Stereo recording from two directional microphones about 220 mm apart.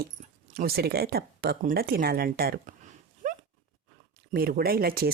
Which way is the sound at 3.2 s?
40° right (ahead or behind).